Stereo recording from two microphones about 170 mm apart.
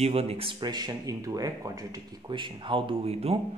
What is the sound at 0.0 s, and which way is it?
Speech, 35° right (ahead or behind).